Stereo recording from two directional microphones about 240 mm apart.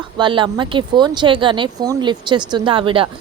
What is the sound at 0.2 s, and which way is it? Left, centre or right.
A woman's voice, centre.